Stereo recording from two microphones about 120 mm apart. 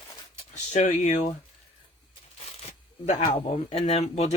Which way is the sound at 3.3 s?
55° left (ahead or behind).